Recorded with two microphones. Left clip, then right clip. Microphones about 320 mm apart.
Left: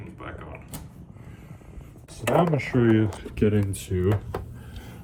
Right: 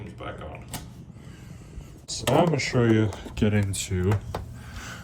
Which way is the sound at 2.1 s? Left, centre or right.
Centre.